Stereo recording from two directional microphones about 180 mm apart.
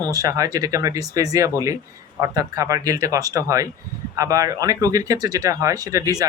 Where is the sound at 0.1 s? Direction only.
20° right (ahead or behind).